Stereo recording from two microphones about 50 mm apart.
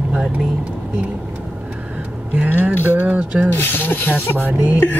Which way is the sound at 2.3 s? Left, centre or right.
Right.